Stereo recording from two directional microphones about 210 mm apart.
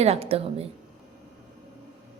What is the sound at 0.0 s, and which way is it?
Speech, 30° right (ahead or behind).